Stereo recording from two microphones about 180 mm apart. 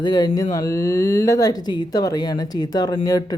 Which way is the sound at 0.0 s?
25° left (ahead or behind).